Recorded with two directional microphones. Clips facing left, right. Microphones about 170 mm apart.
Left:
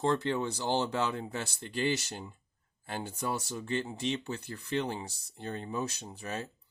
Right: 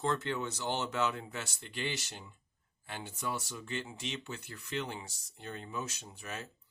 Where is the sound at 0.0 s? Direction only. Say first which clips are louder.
Left 4 dB; 30° left (ahead or behind).